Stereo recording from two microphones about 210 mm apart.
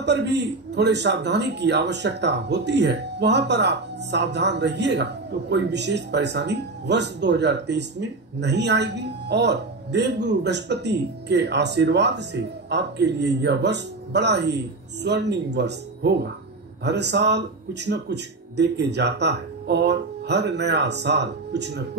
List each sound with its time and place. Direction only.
0.0 s a man's voice: 55° right (ahead or behind)